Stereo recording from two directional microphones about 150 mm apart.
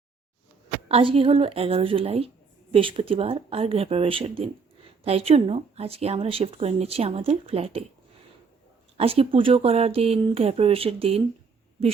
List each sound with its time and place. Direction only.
0.9 s speech: 40° right (ahead or behind)
9.0 s speech: 40° right (ahead or behind)